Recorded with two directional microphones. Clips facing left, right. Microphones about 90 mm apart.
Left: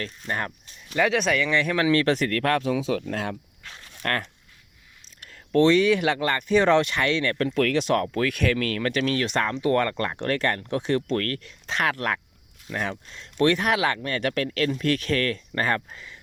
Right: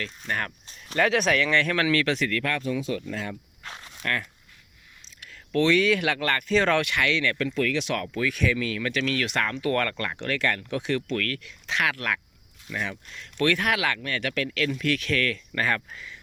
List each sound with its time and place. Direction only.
0.0 s speech: 25° left (ahead or behind)
0.9 s speech: centre (ahead or behind); by 2.0 s 20° left (ahead or behind)
2.0 s speech: 40° left (ahead or behind)
2.6 s speech: 90° left; by 3.3 s 70° left (ahead or behind)
4.0 s speech: 50° left (ahead or behind)
5.2 s speech: 35° left (ahead or behind)
7.5 s speech: 55° left (ahead or behind)
7.8 s speech: 40° left (ahead or behind)
8.2 s speech: 60° left (ahead or behind)
8.9 s speech: 40° left (ahead or behind); by 10.2 s 20° left (ahead or behind)
10.2 s speech: 40° left (ahead or behind)